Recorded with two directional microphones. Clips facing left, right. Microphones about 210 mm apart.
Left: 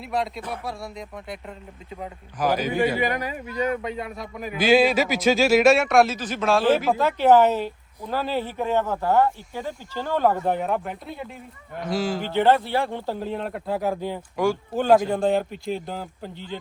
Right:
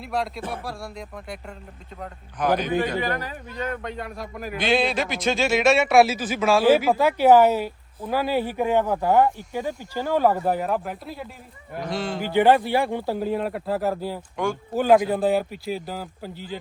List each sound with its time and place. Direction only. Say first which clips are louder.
0.0 s a man's voice: even; centre (ahead or behind)
12.2 s a man's voice: right 3 dB; 15° right (ahead or behind)